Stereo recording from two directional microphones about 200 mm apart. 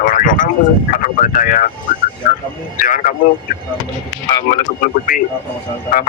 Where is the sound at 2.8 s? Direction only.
40° left (ahead or behind).